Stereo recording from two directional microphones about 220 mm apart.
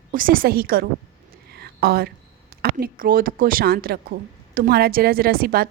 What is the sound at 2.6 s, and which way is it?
Speech, 45° right (ahead or behind).